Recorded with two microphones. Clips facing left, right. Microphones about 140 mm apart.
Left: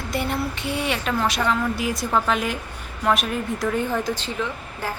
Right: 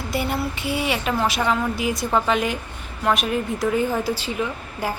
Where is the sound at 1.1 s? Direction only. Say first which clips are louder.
Right 1 dB; 5° right (ahead or behind).